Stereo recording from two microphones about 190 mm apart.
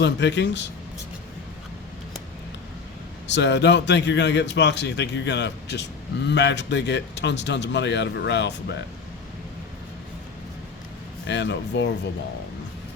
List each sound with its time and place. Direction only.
0.0 s a man's voice: 70° left (ahead or behind)
3.2 s a man's voice: 65° left (ahead or behind)
11.3 s a man's voice: 70° left (ahead or behind)